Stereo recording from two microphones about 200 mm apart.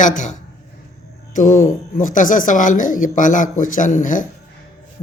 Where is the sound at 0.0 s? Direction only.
40° left (ahead or behind).